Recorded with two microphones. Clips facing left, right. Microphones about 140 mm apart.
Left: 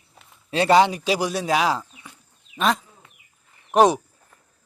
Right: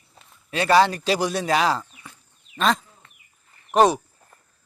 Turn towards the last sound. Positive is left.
turn(degrees=15)  # may be behind; listen again after turning